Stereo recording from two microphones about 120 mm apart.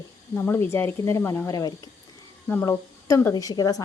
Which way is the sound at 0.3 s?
20° left (ahead or behind).